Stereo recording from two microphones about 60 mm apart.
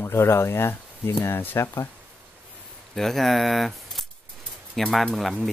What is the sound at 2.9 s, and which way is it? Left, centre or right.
Speech, centre.